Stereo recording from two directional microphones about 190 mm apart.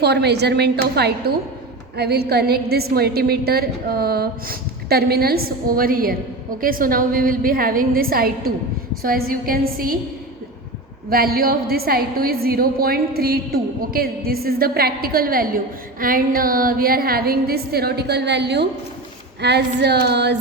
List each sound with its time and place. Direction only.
0.0 s a woman's voice: 60° right (ahead or behind)
11.1 s a woman's voice: 50° right (ahead or behind)